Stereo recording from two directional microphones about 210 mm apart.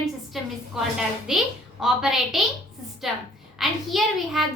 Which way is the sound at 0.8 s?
Centre (ahead or behind).